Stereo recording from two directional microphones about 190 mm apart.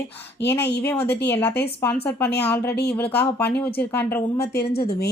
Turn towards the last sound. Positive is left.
turn(degrees=55)  # may be behind; listen again after turning